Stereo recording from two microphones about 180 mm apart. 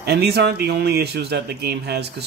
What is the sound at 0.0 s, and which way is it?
Speech, 65° right (ahead or behind).